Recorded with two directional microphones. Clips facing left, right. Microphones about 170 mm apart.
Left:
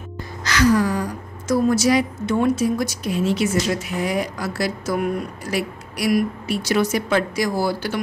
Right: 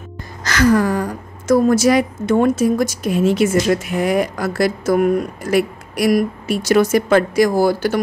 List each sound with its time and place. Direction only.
0.4 s a woman's voice: 50° right (ahead or behind)